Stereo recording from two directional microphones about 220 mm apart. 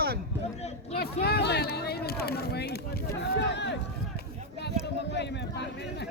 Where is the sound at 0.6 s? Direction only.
30° left (ahead or behind).